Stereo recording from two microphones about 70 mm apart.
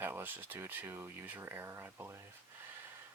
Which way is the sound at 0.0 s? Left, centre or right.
Right.